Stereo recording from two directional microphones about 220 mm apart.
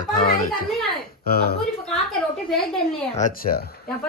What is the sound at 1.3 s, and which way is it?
Speech, 45° left (ahead or behind).